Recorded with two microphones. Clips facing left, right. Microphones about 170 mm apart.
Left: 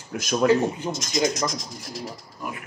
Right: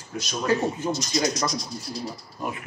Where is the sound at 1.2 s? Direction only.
90° left.